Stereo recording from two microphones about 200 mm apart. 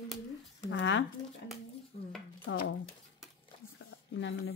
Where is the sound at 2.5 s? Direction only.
75° left (ahead or behind).